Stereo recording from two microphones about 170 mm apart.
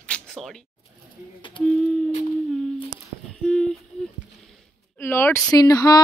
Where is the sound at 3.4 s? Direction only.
5° left (ahead or behind).